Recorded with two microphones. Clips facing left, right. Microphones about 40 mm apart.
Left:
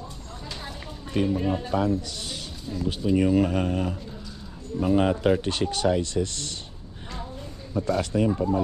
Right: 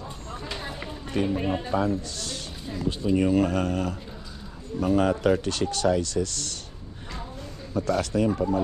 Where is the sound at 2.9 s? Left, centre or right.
Centre.